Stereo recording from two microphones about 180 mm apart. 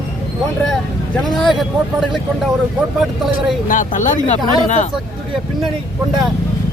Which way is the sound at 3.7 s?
45° left (ahead or behind).